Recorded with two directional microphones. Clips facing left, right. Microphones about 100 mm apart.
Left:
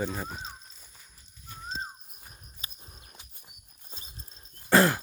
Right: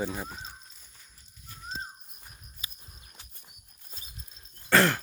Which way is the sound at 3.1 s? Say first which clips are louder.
Left 1 dB; 10° left (ahead or behind).